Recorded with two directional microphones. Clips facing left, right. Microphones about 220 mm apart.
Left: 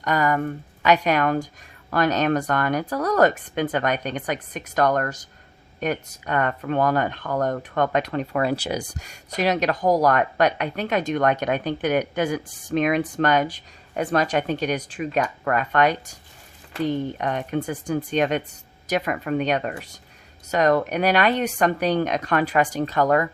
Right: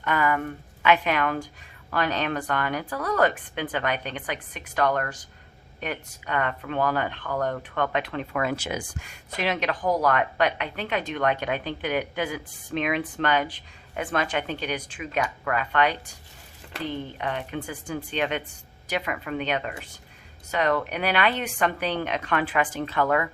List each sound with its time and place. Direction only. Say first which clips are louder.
0.0 s speech: left 3 dB; 40° left (ahead or behind)
17.2 s speech: left 5 dB; 45° left (ahead or behind)